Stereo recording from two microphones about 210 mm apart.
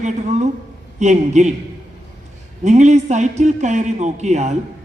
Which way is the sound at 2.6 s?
35° right (ahead or behind).